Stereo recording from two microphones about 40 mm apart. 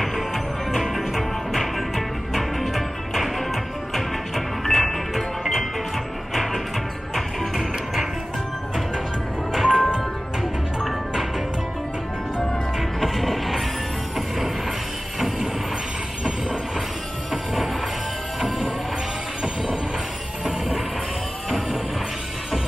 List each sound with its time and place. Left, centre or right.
0.0 s music: centre
9.5 s music: centre
12.7 s music: centre
15.1 s music: centre
19.4 s a sound: right